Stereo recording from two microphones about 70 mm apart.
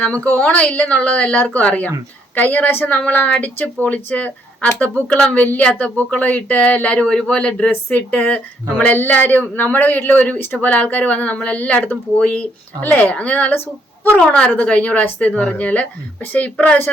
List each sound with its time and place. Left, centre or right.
0.0 s speech: centre